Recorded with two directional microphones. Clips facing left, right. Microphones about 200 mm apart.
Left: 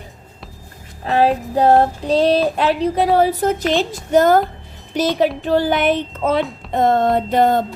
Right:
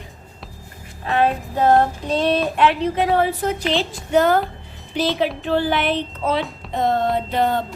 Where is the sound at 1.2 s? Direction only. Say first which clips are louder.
Left 4 dB; 35° left (ahead or behind).